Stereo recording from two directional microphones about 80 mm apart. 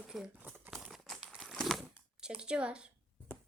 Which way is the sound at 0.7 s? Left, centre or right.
Centre.